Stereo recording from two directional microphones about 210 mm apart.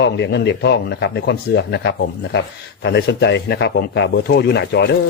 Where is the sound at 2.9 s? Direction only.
55° left (ahead or behind).